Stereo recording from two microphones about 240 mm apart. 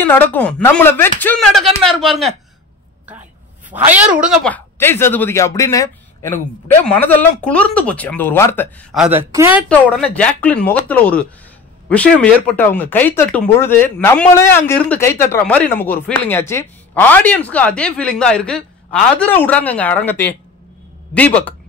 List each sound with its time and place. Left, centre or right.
0.0 s a woman's voice: centre
3.7 s speech: centre
6.9 s speech: centre
9.7 s a woman's voice: centre